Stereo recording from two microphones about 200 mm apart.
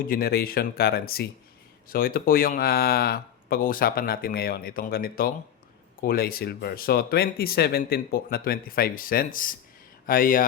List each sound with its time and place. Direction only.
0.1 s speech: 50° left (ahead or behind)